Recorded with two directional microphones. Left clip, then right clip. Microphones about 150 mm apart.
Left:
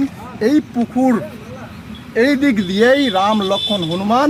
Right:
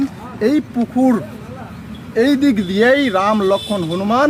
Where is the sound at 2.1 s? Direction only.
40° left (ahead or behind).